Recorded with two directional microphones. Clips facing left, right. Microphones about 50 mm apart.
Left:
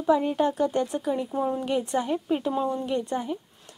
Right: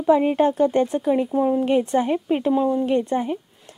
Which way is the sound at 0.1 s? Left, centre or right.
Right.